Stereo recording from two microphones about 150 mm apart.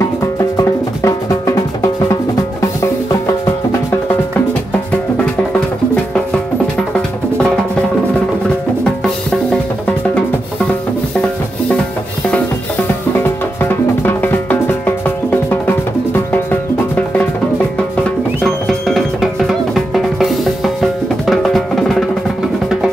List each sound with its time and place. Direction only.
0.4 s music: 20° left (ahead or behind)
13.2 s music: 15° left (ahead or behind)
18.4 s music: centre (ahead or behind)